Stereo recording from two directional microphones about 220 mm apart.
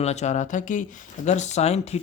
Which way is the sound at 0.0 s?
30° left (ahead or behind).